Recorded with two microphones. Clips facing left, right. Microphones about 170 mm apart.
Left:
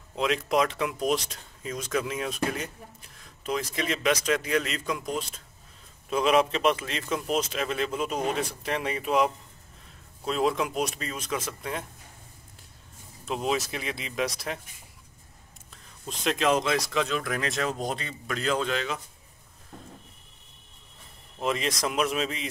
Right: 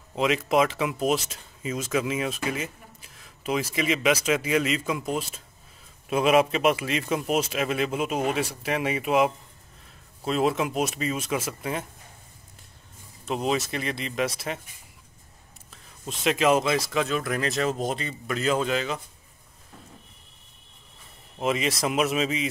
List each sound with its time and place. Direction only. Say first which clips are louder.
0.1 s speech: right 3 dB; 5° right (ahead or behind)
13.2 s speech: right 2 dB; centre (ahead or behind)
15.7 s speech: right 2 dB; centre (ahead or behind)
21.4 s speech: right 3 dB; 5° right (ahead or behind)